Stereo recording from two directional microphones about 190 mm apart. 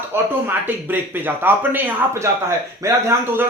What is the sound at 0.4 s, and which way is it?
Speech, 10° right (ahead or behind).